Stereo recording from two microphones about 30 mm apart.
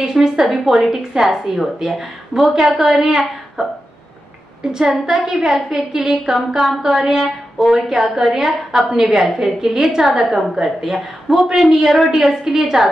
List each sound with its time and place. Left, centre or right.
0.0 s a woman's voice: right
0.4 s a woman's voice: centre
0.8 s a woman's voice: centre
4.6 s a woman's voice: right